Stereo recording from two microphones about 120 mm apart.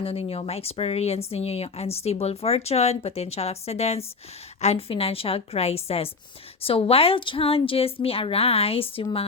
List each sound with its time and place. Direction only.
0.0 s a woman's voice: 55° left (ahead or behind)